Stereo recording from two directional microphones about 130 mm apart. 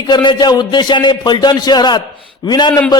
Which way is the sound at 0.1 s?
35° left (ahead or behind).